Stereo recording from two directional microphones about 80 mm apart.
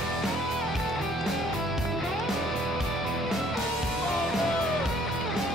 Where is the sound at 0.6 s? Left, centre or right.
Centre.